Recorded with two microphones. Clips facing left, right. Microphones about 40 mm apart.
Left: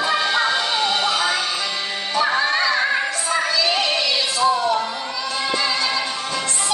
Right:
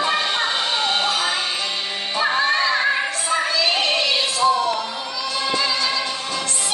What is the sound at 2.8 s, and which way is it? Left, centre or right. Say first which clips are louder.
Opera: even; centre.